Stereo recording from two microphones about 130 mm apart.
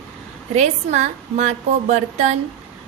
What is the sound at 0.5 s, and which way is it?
A woman's voice, 60° right (ahead or behind).